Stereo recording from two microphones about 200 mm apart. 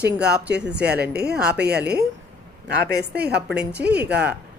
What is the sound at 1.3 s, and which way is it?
Speech, 5° right (ahead or behind).